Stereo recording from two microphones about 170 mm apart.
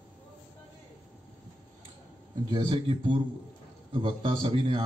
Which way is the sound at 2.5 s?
30° right (ahead or behind).